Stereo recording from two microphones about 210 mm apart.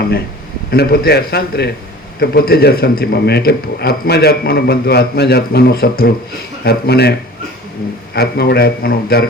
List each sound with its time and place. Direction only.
0.7 s a man's voice: 50° left (ahead or behind)